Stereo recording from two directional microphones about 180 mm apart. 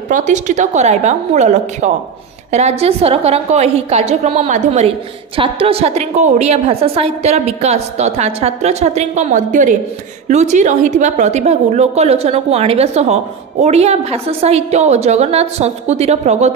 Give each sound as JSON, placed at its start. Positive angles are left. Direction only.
{"t": 0.1, "sound": "a woman's voice", "side_deg": -45}